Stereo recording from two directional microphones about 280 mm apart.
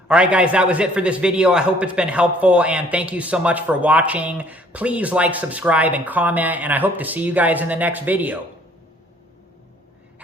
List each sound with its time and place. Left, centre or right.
0.1 s a man's voice: centre